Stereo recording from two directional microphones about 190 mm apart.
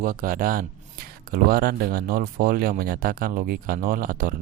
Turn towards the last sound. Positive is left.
turn(degrees=-45)  # may be behind; listen again after turning